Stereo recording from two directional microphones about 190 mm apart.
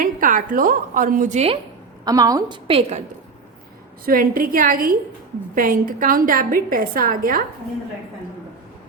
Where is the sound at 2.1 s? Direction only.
20° right (ahead or behind).